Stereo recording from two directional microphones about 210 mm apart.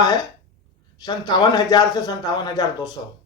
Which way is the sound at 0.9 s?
20° left (ahead or behind).